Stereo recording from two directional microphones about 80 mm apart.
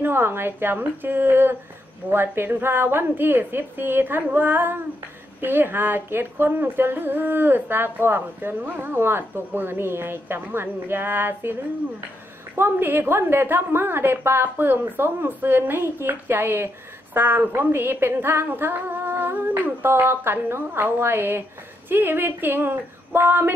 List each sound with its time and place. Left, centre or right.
0.0 s a woman's voice: right
12.5 s a woman's voice: right